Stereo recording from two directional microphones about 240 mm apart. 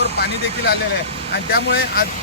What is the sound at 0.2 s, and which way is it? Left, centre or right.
Speech, left.